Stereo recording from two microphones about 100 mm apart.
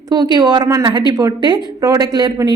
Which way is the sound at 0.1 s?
45° right (ahead or behind).